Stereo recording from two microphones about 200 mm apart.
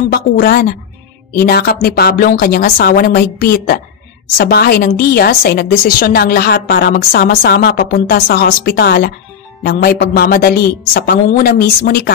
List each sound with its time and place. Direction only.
0.1 s a woman's voice: 50° left (ahead or behind)